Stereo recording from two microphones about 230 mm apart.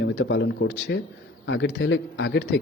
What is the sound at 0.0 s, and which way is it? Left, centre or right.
Speech, left.